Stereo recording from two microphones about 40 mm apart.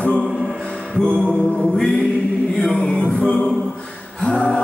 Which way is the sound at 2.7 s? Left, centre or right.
Centre.